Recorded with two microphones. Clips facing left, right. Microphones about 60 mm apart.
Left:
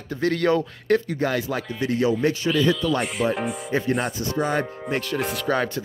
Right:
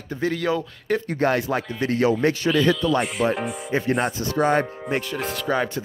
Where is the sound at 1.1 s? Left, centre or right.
Right.